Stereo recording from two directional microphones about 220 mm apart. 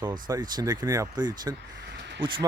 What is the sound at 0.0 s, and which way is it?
Speech, 15° right (ahead or behind).